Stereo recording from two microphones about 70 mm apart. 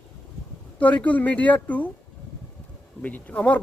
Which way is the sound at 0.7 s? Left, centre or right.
Left.